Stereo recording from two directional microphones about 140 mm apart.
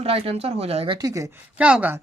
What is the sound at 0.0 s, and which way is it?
Speech, 45° right (ahead or behind).